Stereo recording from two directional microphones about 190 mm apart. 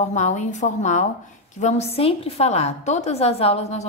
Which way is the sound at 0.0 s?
40° left (ahead or behind).